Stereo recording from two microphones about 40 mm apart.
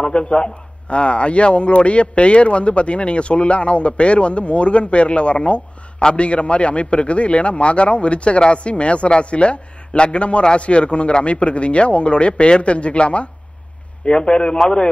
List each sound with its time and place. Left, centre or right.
0.0 s a man's voice: left